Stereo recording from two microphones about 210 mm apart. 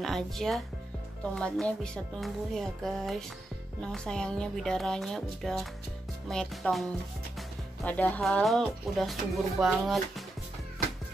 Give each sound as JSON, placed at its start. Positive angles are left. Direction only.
{"t": 0.0, "sound": "speech", "side_deg": 0}